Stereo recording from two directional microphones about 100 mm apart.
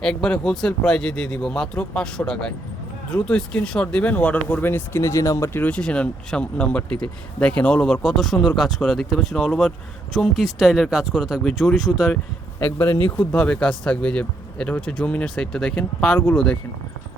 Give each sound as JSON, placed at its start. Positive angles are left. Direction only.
{"t": 0.0, "sound": "speech", "side_deg": 10}
{"t": 5.6, "sound": "speech", "side_deg": 10}
{"t": 12.6, "sound": "speech", "side_deg": 25}
{"t": 13.1, "sound": "speech", "side_deg": 10}